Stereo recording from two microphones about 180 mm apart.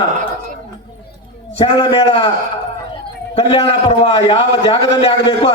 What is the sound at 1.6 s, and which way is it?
Speech, 30° left (ahead or behind).